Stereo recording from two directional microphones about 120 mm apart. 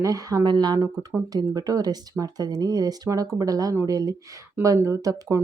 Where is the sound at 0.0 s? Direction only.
30° right (ahead or behind).